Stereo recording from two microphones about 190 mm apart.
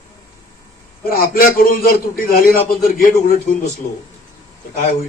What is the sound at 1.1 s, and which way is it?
A man's voice, 50° left (ahead or behind).